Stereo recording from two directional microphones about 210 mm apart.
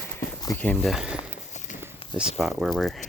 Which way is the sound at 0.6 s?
5° left (ahead or behind).